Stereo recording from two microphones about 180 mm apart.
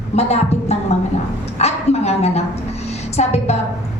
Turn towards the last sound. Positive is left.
turn(degrees=35)  # may be behind; listen again after turning